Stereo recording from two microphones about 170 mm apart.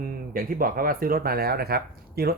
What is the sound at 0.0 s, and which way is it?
Speech, 55° right (ahead or behind).